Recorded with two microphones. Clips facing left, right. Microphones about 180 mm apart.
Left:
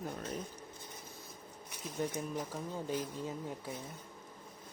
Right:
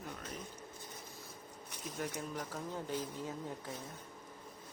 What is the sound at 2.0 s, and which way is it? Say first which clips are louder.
Speech: left 4 dB; 15° left (ahead or behind).